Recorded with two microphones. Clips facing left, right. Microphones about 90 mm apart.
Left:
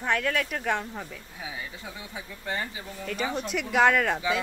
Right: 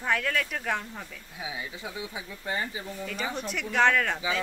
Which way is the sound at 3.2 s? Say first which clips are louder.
Left 4 dB; 5° left (ahead or behind).